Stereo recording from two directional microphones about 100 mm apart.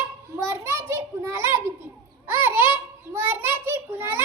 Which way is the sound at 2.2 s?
20° right (ahead or behind).